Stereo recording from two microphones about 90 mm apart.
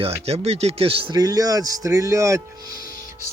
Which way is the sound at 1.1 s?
45° right (ahead or behind).